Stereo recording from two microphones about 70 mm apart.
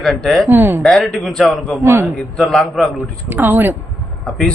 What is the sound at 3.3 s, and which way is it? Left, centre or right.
Speech, right.